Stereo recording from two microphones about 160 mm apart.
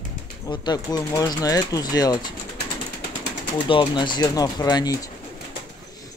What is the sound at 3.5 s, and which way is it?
Speech, 30° left (ahead or behind).